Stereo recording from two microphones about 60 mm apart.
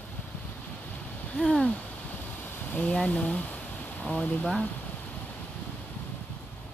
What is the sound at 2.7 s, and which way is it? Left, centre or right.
Speech, centre.